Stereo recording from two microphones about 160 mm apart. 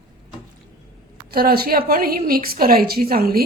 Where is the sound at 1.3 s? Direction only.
70° right (ahead or behind).